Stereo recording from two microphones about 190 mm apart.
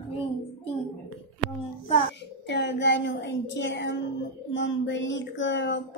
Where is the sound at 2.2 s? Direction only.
65° left (ahead or behind).